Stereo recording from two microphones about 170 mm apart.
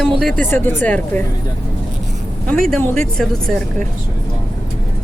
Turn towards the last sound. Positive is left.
turn(degrees=5)  # may be behind; listen again after turning